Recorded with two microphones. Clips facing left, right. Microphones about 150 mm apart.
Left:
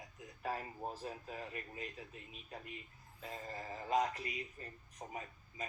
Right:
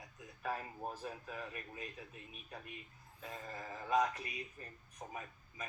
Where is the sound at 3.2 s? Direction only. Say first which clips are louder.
Left 1 dB; 30° left (ahead or behind).